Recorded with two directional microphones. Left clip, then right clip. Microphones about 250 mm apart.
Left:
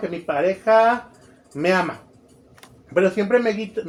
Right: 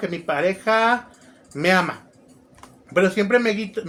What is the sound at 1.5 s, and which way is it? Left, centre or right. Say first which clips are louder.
Speech: right 1 dB; right.